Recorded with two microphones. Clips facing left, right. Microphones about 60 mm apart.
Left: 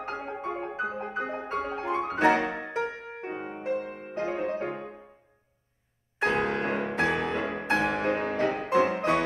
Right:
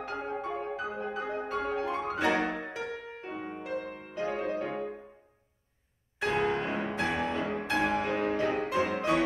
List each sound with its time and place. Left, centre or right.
0.0 s music: left
6.2 s music: left